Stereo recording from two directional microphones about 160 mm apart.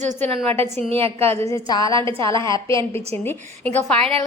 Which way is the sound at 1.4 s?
20° left (ahead or behind).